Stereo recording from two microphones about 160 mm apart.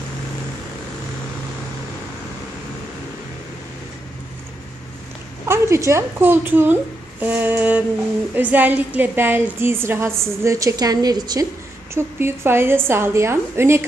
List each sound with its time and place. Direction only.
5.5 s a woman's voice: 15° right (ahead or behind)